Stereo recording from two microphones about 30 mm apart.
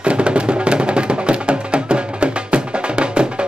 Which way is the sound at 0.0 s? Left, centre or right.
Right.